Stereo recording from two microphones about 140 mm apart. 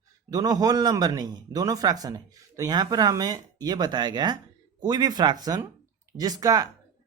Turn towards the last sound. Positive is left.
turn(degrees=-25)  # may be behind; listen again after turning